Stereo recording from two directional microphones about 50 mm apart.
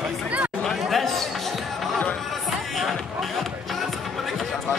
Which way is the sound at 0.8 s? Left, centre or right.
Centre.